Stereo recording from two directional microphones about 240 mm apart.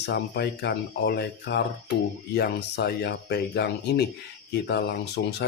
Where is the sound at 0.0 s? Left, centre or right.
Left.